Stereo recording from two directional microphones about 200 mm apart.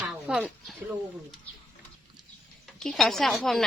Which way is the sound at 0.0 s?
5° right (ahead or behind).